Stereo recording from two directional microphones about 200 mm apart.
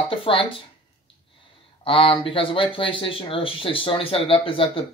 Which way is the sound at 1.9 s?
25° left (ahead or behind).